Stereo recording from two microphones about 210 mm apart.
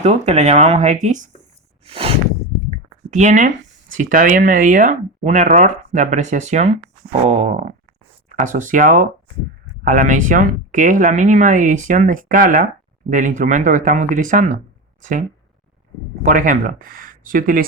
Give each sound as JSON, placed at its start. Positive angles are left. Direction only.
{"t": 0.0, "sound": "speech", "side_deg": -30}
{"t": 1.8, "sound": "a sound", "side_deg": -25}
{"t": 2.6, "sound": "speech", "side_deg": -35}
{"t": 16.2, "sound": "speech", "side_deg": -40}